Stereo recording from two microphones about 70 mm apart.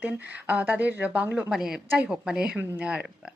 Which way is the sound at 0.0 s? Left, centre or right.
Right.